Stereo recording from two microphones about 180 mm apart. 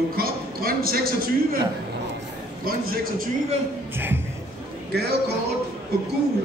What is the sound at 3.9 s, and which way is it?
Speech, 10° right (ahead or behind).